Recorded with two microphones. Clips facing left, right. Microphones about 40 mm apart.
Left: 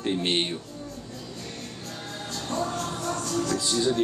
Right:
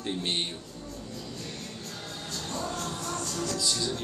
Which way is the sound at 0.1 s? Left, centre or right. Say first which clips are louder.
Left 5 dB; left.